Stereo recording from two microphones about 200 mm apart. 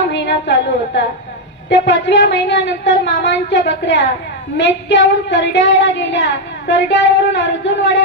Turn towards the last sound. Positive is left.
turn(degrees=60)  # may be behind; listen again after turning